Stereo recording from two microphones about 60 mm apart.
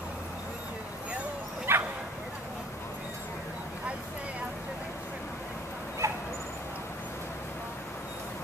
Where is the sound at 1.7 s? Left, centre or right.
Right.